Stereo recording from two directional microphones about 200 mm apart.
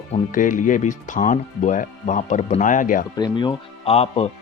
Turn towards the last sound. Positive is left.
turn(degrees=30)  # may be behind; listen again after turning